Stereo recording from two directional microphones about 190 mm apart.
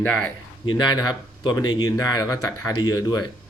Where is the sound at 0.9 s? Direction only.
20° left (ahead or behind).